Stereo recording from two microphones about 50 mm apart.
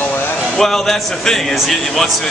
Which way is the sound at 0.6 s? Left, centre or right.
Centre.